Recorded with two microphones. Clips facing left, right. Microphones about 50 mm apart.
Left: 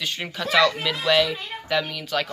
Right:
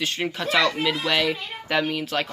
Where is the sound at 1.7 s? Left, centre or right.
Right.